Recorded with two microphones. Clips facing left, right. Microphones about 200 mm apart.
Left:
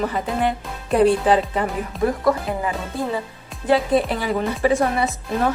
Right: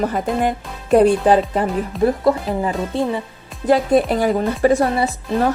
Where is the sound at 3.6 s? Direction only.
45° right (ahead or behind).